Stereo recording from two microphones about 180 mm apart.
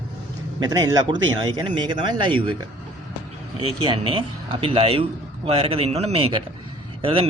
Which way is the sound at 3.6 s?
30° right (ahead or behind).